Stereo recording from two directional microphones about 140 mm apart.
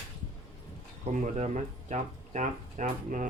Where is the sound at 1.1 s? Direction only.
55° right (ahead or behind).